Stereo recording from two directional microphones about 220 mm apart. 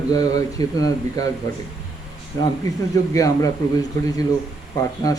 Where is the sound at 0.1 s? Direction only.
15° left (ahead or behind).